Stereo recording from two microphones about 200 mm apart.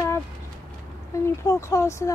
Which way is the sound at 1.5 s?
15° left (ahead or behind).